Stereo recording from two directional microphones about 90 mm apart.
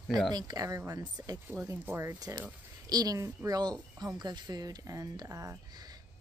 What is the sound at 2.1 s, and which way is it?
A woman's voice, 45° right (ahead or behind).